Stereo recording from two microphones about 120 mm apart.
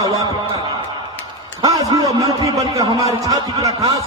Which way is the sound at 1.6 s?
30° right (ahead or behind).